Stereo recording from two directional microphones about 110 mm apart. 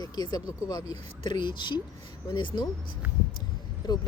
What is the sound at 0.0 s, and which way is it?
Speech, 40° left (ahead or behind).